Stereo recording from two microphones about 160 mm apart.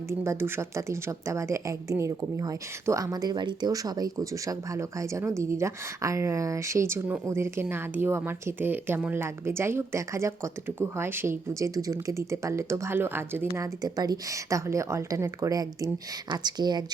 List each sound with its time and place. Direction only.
0.1 s a woman's voice: 15° right (ahead or behind)